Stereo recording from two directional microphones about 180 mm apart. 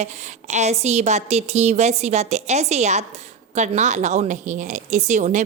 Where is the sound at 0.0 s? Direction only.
40° right (ahead or behind).